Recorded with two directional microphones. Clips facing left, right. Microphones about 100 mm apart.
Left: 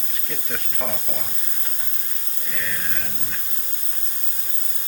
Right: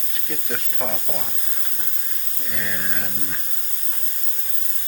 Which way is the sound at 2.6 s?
15° right (ahead or behind).